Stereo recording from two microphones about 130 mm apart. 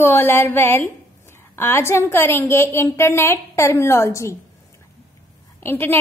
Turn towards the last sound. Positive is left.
turn(degrees=15)  # may be behind; listen again after turning